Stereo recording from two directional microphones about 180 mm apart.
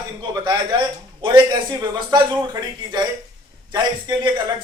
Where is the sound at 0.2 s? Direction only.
25° right (ahead or behind).